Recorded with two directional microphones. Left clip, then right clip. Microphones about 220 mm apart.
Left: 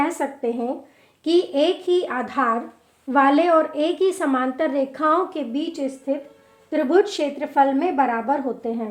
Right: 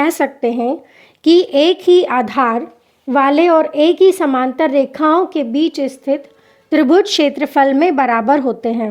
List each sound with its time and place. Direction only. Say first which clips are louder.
0.0 s a woman's voice: right 8 dB; 45° right (ahead or behind)